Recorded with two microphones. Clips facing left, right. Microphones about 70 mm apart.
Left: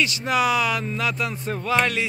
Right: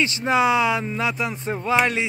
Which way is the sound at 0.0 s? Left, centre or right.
Right.